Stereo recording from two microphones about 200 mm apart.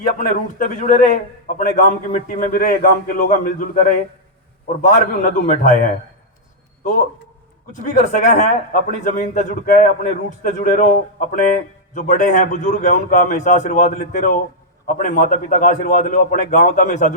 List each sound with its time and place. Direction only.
0.0 s a man's voice: 40° left (ahead or behind)
7.7 s a man's voice: 40° left (ahead or behind)